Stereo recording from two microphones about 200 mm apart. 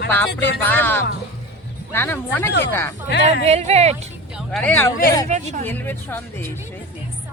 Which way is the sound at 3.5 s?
30° right (ahead or behind).